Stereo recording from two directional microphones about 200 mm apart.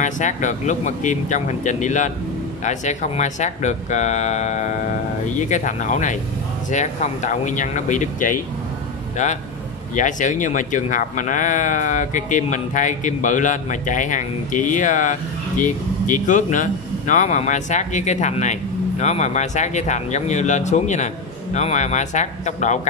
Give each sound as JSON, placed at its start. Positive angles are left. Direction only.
{"t": 0.0, "sound": "speech", "side_deg": 40}
{"t": 9.9, "sound": "speech", "side_deg": 40}